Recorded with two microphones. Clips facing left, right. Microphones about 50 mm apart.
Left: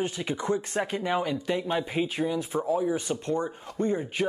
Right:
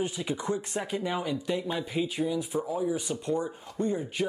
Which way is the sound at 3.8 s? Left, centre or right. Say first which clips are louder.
Left 3 dB; centre.